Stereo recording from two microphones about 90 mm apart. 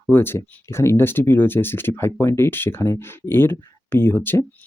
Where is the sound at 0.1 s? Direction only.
25° left (ahead or behind).